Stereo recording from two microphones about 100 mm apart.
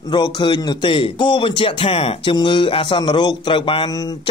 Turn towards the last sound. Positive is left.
turn(degrees=60)  # may be behind; listen again after turning